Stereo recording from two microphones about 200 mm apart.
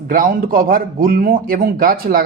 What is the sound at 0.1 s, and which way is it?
Speech, 45° right (ahead or behind).